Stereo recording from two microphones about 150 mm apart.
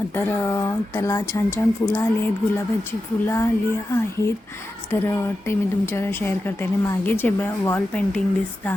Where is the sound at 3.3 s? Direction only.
15° left (ahead or behind).